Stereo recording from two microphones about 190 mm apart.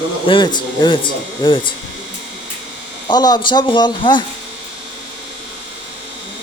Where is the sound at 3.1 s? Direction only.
20° left (ahead or behind).